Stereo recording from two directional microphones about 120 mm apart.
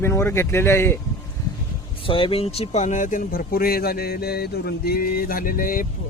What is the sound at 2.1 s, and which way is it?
Speech, 50° left (ahead or behind).